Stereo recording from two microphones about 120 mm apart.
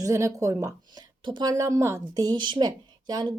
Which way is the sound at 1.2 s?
40° right (ahead or behind).